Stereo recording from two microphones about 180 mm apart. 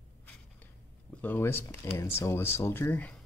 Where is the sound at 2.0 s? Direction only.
15° left (ahead or behind).